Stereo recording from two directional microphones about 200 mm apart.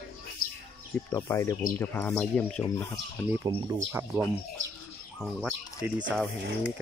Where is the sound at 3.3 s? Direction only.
15° right (ahead or behind).